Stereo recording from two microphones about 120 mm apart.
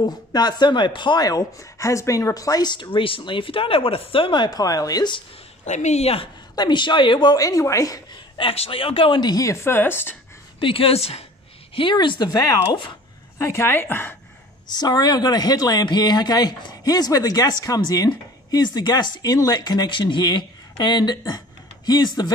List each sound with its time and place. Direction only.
0.0 s speech: 35° left (ahead or behind)
5.7 s a woman's voice: 75° left (ahead or behind)
6.5 s speech: 40° left (ahead or behind)
8.4 s speech: 50° left (ahead or behind); by 10.1 s 20° left (ahead or behind)
10.6 s speech: 50° left (ahead or behind)
11.7 s speech: 45° left (ahead or behind)
13.4 s a woman's voice: 20° left (ahead or behind)
14.7 s speech: 35° left (ahead or behind)